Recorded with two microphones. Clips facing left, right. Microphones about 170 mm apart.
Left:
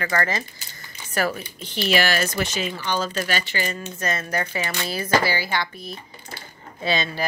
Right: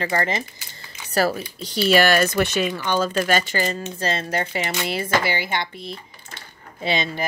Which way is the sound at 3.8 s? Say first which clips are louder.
Right 2 dB; 30° right (ahead or behind).